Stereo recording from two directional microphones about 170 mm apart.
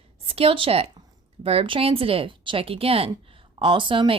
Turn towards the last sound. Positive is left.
turn(degrees=-30)  # may be behind; listen again after turning